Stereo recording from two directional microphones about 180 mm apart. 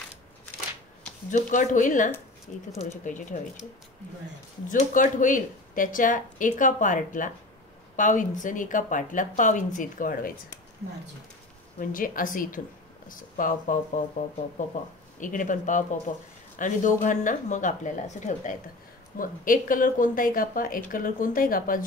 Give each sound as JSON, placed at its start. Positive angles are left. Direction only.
{"t": 1.3, "sound": "a woman's voice", "side_deg": 45}
{"t": 4.6, "sound": "a woman's voice", "side_deg": 45}
{"t": 11.8, "sound": "a woman's voice", "side_deg": 50}